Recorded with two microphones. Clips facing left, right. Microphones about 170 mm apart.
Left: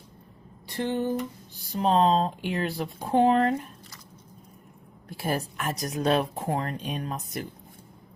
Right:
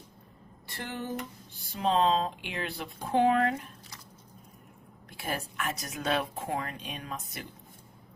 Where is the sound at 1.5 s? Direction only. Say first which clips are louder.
Left 4 dB; 40° left (ahead or behind).